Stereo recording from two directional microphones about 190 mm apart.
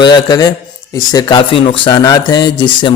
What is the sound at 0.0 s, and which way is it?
Speech, 20° left (ahead or behind).